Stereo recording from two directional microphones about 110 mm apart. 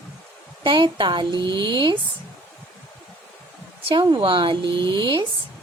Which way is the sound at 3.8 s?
50° right (ahead or behind).